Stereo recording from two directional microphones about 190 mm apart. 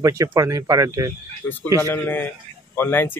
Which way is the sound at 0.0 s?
15° right (ahead or behind).